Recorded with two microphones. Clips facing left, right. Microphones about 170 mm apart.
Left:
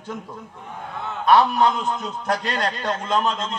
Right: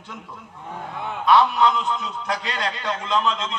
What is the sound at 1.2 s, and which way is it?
A man's voice, 45° left (ahead or behind).